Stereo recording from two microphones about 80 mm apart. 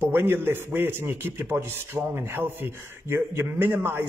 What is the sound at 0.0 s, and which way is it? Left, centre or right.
A man's voice, right.